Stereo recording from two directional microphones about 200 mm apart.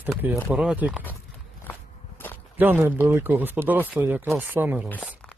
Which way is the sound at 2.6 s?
10° right (ahead or behind).